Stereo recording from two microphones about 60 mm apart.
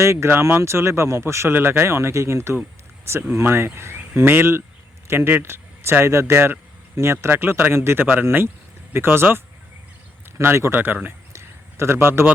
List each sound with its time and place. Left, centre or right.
0.0 s speech: right
8.0 s speech: right
11.3 s a sound: right